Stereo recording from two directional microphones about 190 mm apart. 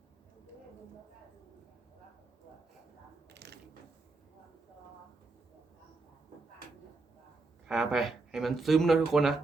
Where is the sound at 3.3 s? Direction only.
60° right (ahead or behind).